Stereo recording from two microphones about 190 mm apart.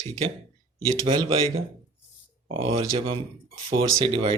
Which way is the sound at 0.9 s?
25° right (ahead or behind).